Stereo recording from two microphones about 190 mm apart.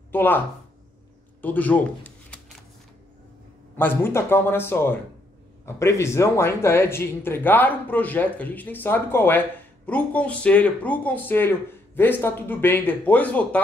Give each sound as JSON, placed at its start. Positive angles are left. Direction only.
{"t": 0.1, "sound": "speech", "side_deg": 10}
{"t": 1.4, "sound": "speech", "side_deg": 10}
{"t": 3.7, "sound": "speech", "side_deg": 10}